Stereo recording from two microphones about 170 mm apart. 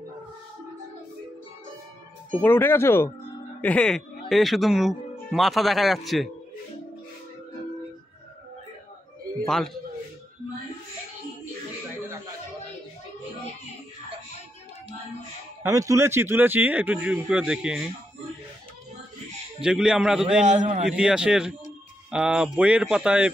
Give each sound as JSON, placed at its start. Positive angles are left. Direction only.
{"t": 2.4, "sound": "speech", "side_deg": 10}
{"t": 15.7, "sound": "speech", "side_deg": -20}
{"t": 19.6, "sound": "speech", "side_deg": -5}
{"t": 20.3, "sound": "a man's voice", "side_deg": -45}
{"t": 20.8, "sound": "speech", "side_deg": -5}